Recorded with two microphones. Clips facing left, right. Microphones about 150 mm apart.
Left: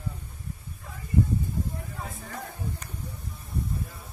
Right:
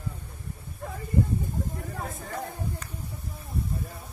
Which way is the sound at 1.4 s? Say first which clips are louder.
Even; 45° right (ahead or behind).